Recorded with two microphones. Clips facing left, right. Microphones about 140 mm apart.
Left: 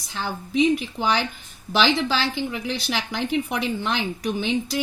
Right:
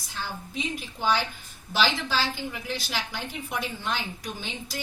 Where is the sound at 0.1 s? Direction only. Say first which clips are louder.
Left 8 dB; 85° left.